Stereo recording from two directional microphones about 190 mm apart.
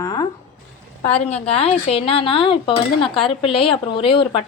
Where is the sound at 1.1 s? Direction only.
30° left (ahead or behind).